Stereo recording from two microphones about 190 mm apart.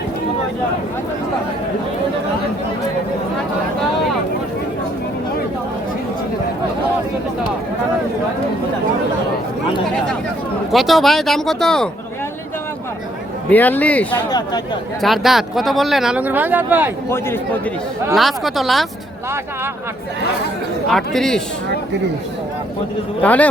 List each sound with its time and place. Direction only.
10.7 s speech: centre (ahead or behind)
13.5 s speech: 10° left (ahead or behind)
14.3 s speech: 20° left (ahead or behind)
15.0 s speech: centre (ahead or behind)
17.1 s speech: 10° left (ahead or behind)
18.1 s speech: centre (ahead or behind)
20.9 s speech: centre (ahead or behind)
23.2 s speech: 10° left (ahead or behind)